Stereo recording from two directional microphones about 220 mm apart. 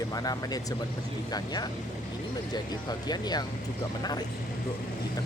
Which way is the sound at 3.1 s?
20° left (ahead or behind).